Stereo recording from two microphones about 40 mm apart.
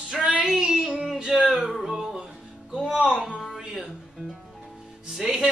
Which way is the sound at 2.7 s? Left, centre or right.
Centre.